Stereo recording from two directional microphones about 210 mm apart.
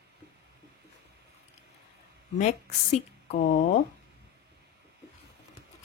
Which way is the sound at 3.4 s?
45° left (ahead or behind).